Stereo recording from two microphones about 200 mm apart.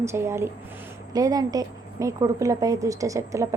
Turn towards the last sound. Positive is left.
turn(degrees=-15)  # may be behind; listen again after turning